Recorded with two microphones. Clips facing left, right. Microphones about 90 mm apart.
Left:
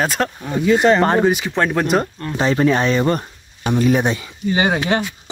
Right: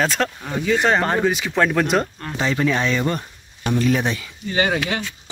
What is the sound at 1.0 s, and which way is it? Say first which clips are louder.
Speech: left 5 dB; 30° left (ahead or behind).